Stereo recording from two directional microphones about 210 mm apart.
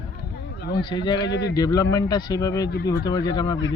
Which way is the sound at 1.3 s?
55° left (ahead or behind).